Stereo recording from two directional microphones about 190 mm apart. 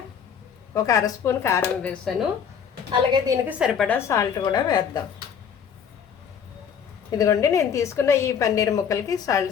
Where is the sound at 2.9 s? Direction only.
20° right (ahead or behind).